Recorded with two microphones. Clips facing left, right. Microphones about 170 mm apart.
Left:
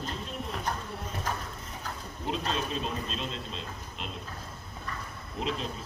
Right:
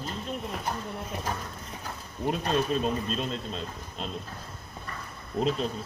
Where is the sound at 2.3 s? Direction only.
50° right (ahead or behind).